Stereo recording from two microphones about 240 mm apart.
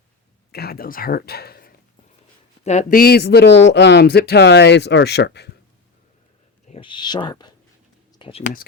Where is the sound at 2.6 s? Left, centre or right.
Left.